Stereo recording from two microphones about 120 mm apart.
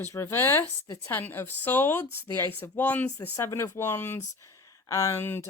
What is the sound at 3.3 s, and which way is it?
Speech, 25° left (ahead or behind).